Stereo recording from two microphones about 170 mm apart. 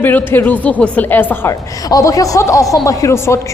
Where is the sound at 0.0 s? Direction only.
10° left (ahead or behind).